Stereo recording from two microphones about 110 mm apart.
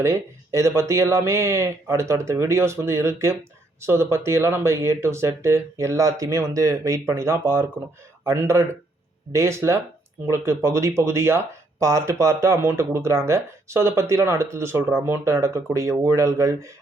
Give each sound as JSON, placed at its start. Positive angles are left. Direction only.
{"t": 0.0, "sound": "speech", "side_deg": -25}